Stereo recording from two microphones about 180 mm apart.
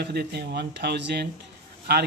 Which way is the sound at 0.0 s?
65° right (ahead or behind).